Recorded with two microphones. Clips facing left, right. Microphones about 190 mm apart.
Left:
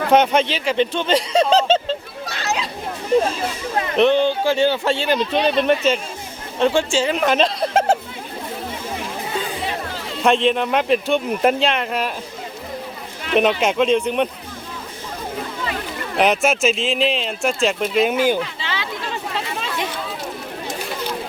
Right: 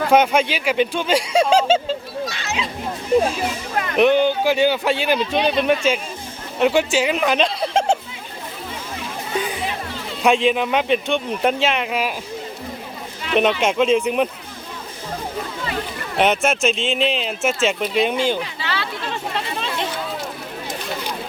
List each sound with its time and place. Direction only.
0.1 s speech: 10° right (ahead or behind)
3.9 s speech: 10° right (ahead or behind)
10.2 s speech: 5° right (ahead or behind)
13.3 s speech: centre (ahead or behind)
16.1 s speech: centre (ahead or behind)
18.7 s a sound: 15° left (ahead or behind)